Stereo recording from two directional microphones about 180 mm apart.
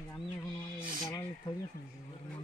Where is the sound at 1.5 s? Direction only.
25° left (ahead or behind).